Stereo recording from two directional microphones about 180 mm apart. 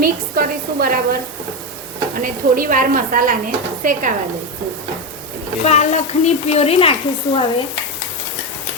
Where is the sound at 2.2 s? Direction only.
50° right (ahead or behind).